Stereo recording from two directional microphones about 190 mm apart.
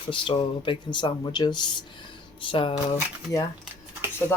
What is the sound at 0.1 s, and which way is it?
Speech, 25° left (ahead or behind).